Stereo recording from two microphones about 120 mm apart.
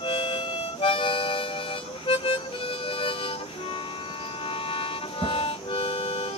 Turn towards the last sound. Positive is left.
turn(degrees=50)  # may be behind; listen again after turning